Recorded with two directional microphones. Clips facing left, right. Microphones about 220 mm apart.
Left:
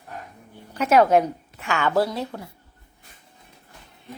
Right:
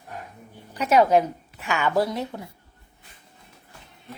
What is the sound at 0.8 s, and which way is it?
Speech, centre (ahead or behind).